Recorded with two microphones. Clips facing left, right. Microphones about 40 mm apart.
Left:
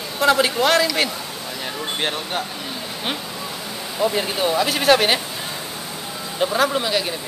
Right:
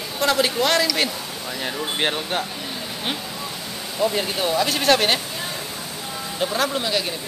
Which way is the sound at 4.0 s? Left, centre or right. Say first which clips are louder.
Left 1 dB; centre.